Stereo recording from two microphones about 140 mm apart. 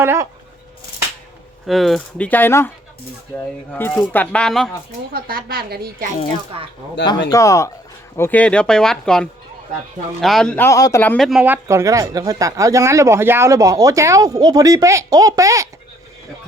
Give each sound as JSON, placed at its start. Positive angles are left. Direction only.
{"t": 0.0, "sound": "speech", "side_deg": -20}
{"t": 1.6, "sound": "speech", "side_deg": 0}
{"t": 5.1, "sound": "a woman's voice", "side_deg": -90}
{"t": 6.5, "sound": "speech", "side_deg": -45}
{"t": 7.0, "sound": "speech", "side_deg": 30}
{"t": 10.7, "sound": "speech", "side_deg": 25}
{"t": 11.2, "sound": "speech", "side_deg": 0}
{"t": 11.4, "sound": "speech", "side_deg": -15}